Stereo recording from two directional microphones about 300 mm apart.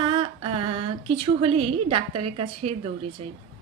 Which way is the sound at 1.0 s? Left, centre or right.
Centre.